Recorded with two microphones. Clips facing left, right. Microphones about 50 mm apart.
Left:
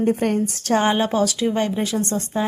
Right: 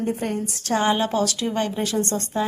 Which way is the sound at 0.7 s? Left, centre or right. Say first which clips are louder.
Left 2 dB; left.